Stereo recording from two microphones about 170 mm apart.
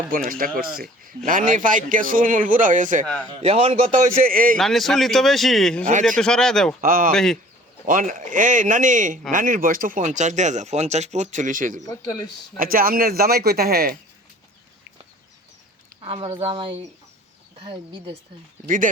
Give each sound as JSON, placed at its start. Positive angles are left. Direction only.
{"t": 0.3, "sound": "speech", "side_deg": -55}
{"t": 3.2, "sound": "a man's voice", "side_deg": -30}
{"t": 4.5, "sound": "speech", "side_deg": 0}
{"t": 6.8, "sound": "speech", "side_deg": -55}
{"t": 7.1, "sound": "speech", "side_deg": 0}
{"t": 7.9, "sound": "speech", "side_deg": -50}
{"t": 16.0, "sound": "a man's voice", "side_deg": -35}